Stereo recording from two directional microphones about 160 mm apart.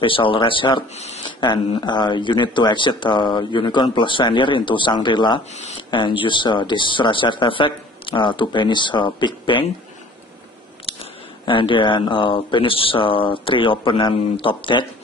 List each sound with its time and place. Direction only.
0.0 s speech: 30° left (ahead or behind)
1.4 s speech: 30° left (ahead or behind)
10.9 s speech: 35° left (ahead or behind)